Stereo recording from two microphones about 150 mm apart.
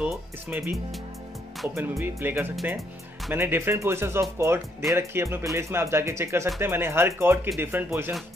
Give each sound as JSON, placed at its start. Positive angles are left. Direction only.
{"t": 0.0, "sound": "speech", "side_deg": -15}
{"t": 1.8, "sound": "speech", "side_deg": -20}